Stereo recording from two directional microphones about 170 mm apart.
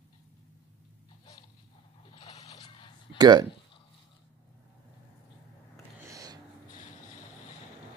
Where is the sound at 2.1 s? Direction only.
35° left (ahead or behind).